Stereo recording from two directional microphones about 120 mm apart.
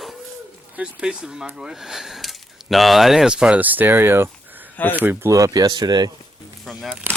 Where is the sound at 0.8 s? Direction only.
10° right (ahead or behind); by 6.1 s 35° right (ahead or behind).